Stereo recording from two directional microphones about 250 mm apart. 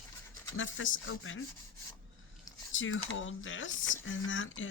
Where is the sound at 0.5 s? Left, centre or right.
Left.